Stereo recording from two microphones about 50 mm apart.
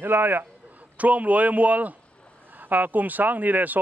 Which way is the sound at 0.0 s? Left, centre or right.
Right.